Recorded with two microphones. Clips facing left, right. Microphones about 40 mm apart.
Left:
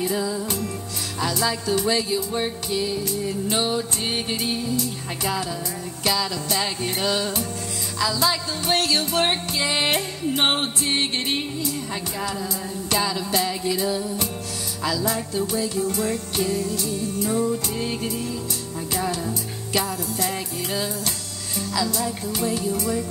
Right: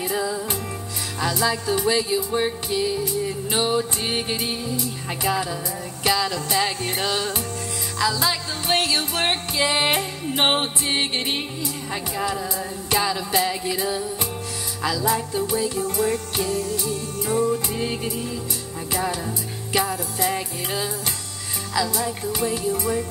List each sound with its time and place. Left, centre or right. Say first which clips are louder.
0.0 s music: even; centre